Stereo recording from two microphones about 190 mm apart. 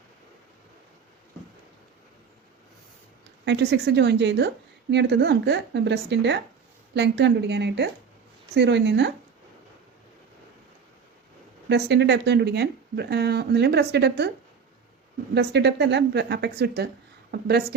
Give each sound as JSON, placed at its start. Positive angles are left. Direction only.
{"t": 3.4, "sound": "a woman's voice", "side_deg": -65}
{"t": 11.7, "sound": "a woman's voice", "side_deg": -65}
{"t": 15.4, "sound": "a woman's voice", "side_deg": -65}